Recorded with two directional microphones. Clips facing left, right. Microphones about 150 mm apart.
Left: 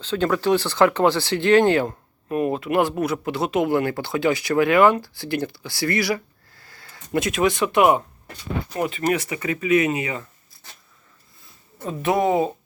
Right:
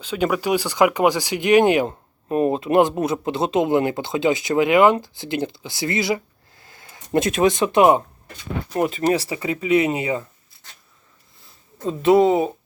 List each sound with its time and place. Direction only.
0.0 s speech: 10° right (ahead or behind)
2.3 s speech: 25° right (ahead or behind)
8.7 s speech: 40° right (ahead or behind)
9.1 s speech: 30° right (ahead or behind)
11.9 s speech: 20° right (ahead or behind)